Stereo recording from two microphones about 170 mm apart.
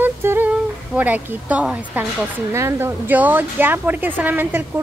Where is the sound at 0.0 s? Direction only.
10° right (ahead or behind).